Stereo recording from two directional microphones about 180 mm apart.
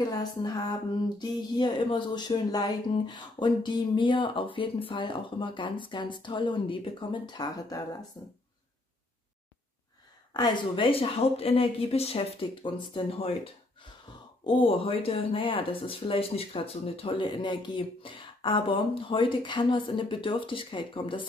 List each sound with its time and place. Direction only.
0.0 s speech: 25° left (ahead or behind)
1.6 s speech: 25° left (ahead or behind)
10.3 s speech: 25° left (ahead or behind)